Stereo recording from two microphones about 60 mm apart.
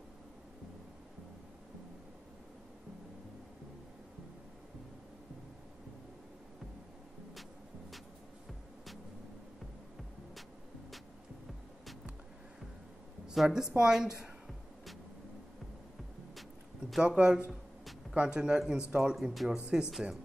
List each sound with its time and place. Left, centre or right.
13.3 s a woman's voice: centre
17.0 s a woman's voice: centre